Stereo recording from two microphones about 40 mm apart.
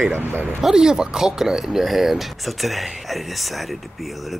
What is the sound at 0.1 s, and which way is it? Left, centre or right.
Speech, right.